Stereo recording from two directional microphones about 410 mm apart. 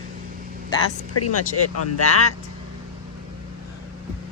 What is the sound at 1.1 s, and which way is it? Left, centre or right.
Speech, left.